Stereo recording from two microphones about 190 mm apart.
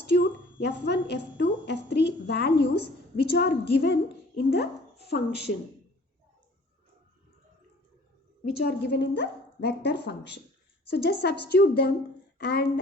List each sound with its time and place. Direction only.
0.0 s a woman's voice: 60° left (ahead or behind)
8.4 s a woman's voice: 55° left (ahead or behind)